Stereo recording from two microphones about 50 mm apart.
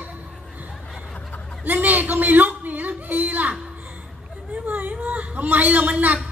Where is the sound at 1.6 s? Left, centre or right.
Right.